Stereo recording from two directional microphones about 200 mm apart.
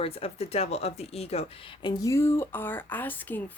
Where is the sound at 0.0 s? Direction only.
30° left (ahead or behind).